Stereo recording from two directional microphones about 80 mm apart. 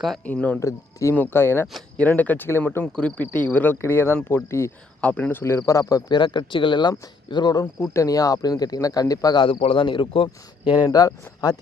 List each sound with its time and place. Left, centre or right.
0.3 s speech: centre
0.6 s speech: left
1.1 s speech: left
2.8 s speech: centre; by 4.7 s left
4.9 s speech: centre
5.3 s speech: left
6.1 s speech: left
7.5 s speech: left
9.4 s speech: left
10.8 s speech: left